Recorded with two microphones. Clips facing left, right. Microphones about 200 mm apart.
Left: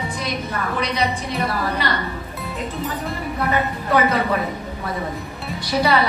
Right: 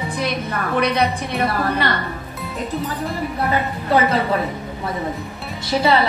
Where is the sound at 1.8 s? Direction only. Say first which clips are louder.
Right 2 dB; 55° right (ahead or behind).